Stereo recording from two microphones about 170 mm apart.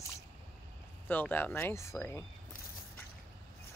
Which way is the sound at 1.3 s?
10° left (ahead or behind).